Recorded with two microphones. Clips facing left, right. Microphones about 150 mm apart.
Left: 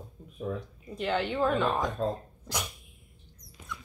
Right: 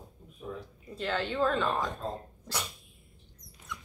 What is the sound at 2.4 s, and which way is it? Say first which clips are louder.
Dog: left 2 dB; 15° left (ahead or behind).